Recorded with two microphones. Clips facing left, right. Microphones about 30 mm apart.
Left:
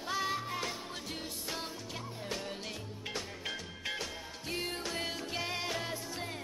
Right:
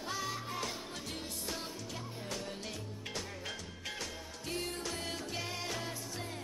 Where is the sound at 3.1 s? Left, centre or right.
Centre.